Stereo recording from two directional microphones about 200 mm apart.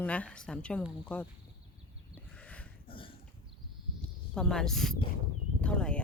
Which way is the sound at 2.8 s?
25° left (ahead or behind).